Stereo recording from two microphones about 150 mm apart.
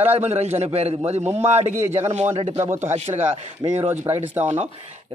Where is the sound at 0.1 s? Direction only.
45° right (ahead or behind).